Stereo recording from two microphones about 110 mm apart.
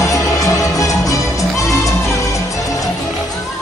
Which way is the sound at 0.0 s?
25° left (ahead or behind).